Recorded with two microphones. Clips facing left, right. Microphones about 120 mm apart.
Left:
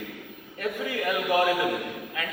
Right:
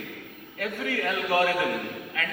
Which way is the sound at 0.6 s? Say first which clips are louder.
Even; 20° left (ahead or behind).